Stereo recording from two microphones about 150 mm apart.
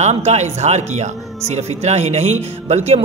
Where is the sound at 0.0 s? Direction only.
45° right (ahead or behind).